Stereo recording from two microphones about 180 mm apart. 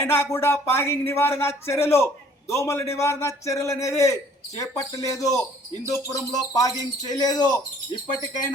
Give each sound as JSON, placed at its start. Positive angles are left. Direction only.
{"t": 0.0, "sound": "a man's voice", "side_deg": 15}